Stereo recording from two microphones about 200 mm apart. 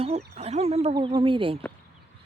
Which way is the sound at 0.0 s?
30° right (ahead or behind).